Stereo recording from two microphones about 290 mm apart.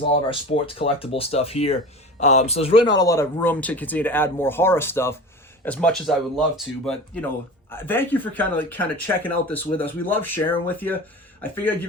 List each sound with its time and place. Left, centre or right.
0.3 s speech: centre